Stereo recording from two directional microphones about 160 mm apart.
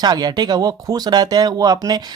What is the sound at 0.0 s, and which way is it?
Speech, 25° right (ahead or behind).